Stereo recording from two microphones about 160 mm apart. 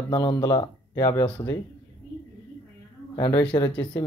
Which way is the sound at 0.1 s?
30° left (ahead or behind).